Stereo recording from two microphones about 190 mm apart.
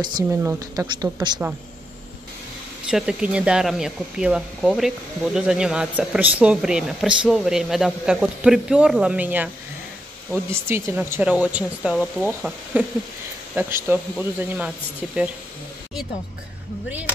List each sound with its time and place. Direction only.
0.0 s a woman's voice: 20° right (ahead or behind)
2.9 s speech: 5° right (ahead or behind)
13.8 s speech: 5° right (ahead or behind)